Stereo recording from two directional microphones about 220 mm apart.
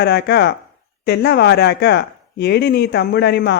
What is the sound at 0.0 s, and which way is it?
Speech, 50° left (ahead or behind).